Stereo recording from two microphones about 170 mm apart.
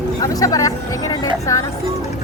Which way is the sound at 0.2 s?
20° left (ahead or behind).